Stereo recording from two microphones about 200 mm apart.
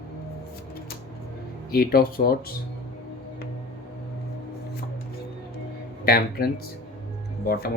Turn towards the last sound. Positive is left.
turn(degrees=50)  # may be behind; listen again after turning